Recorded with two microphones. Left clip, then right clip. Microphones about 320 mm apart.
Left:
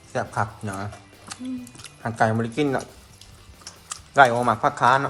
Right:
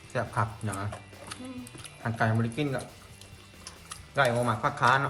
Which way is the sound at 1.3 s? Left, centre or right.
Centre.